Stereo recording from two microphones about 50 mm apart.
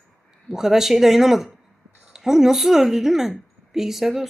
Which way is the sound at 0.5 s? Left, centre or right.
Centre.